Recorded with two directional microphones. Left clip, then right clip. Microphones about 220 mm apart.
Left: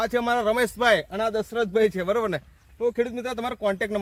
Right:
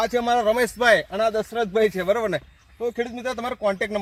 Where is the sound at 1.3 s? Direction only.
20° right (ahead or behind).